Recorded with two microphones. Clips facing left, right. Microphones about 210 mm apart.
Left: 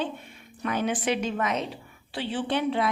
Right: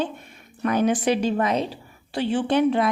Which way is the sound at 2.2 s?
45° right (ahead or behind).